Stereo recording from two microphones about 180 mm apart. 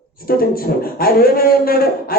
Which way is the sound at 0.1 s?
55° left (ahead or behind).